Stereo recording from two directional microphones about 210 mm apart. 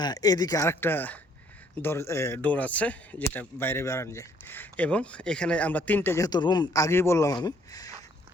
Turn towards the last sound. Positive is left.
turn(degrees=15)  # may be behind; listen again after turning